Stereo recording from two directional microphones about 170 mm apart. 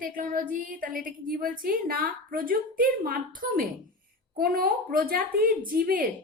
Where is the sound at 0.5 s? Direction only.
55° right (ahead or behind).